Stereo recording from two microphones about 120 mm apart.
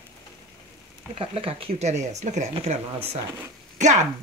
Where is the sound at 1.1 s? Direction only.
50° right (ahead or behind).